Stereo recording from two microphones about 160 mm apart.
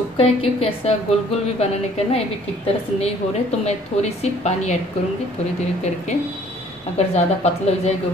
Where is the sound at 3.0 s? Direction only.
45° left (ahead or behind).